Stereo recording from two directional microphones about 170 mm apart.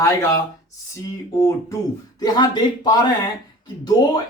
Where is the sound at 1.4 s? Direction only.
20° left (ahead or behind).